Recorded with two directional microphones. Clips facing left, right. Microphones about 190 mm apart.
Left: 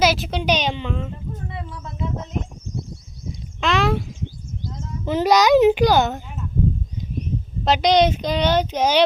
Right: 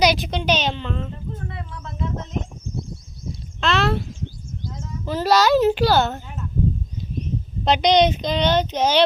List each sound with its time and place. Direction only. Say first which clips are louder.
0.0 s a child's voice: even; 5° left (ahead or behind)
3.6 s speech: left 1 dB; 15° left (ahead or behind)
5.0 s a child's voice: left 2 dB; 15° left (ahead or behind)
7.2 s speech: even; 5° left (ahead or behind)